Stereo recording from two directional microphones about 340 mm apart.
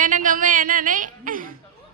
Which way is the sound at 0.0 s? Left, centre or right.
Right.